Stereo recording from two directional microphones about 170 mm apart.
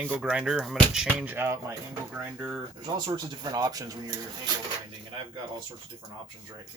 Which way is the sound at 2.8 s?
25° right (ahead or behind).